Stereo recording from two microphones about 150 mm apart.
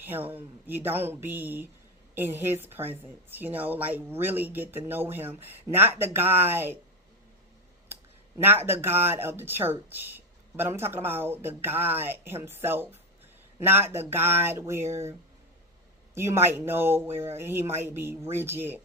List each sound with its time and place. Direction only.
0.0 s speech: 15° right (ahead or behind)
8.6 s speech: 15° right (ahead or behind)
16.1 s speech: 15° right (ahead or behind)